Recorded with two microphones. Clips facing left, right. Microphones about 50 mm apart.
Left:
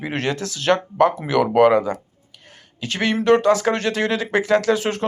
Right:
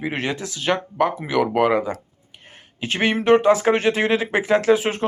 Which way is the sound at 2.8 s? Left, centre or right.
Right.